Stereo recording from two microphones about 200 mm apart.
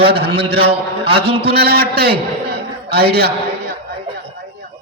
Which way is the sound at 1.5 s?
50° right (ahead or behind).